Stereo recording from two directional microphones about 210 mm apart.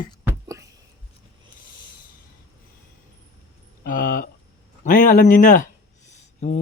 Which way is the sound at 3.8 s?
40° left (ahead or behind).